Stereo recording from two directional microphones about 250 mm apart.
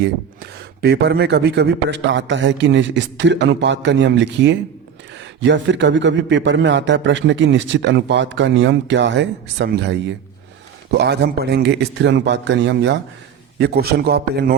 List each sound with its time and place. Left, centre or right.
0.8 s a man's voice: right